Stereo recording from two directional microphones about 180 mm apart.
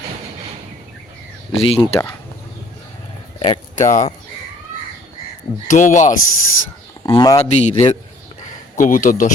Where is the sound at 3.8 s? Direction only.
45° left (ahead or behind).